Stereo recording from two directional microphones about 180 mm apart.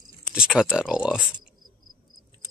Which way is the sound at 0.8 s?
5° right (ahead or behind).